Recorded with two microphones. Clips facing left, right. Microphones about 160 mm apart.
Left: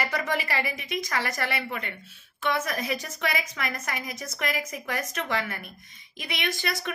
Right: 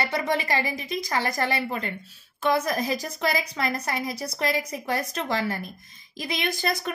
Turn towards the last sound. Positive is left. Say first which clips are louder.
# right 3 dB
turn(degrees=-35)  # may be behind; listen again after turning